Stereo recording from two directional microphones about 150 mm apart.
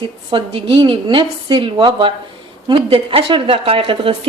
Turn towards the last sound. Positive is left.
turn(degrees=-35)  # may be behind; listen again after turning